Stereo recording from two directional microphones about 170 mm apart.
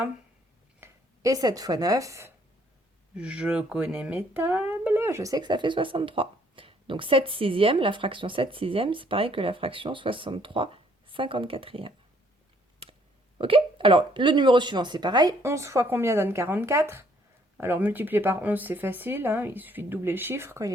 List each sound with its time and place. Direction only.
0.8 s speech: 20° right (ahead or behind)
3.2 s speech: 5° right (ahead or behind); by 11.9 s 30° right (ahead or behind)
13.4 s speech: 30° right (ahead or behind)